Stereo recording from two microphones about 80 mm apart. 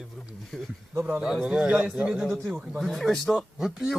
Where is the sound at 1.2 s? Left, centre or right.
Centre.